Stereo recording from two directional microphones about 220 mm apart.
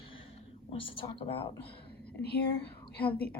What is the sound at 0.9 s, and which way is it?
Speech, 25° left (ahead or behind).